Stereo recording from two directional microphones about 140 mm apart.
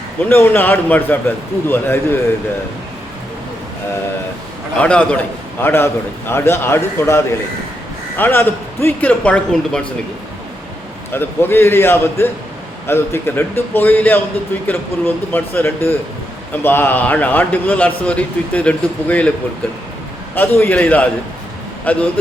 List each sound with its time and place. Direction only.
0.3 s a man's voice: 15° left (ahead or behind)
4.8 s a man's voice: 10° left (ahead or behind)
11.1 s a man's voice: 15° left (ahead or behind)
20.3 s a man's voice: 15° left (ahead or behind)